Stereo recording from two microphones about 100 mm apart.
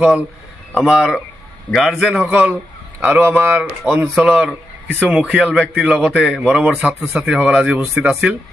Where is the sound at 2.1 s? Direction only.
10° right (ahead or behind).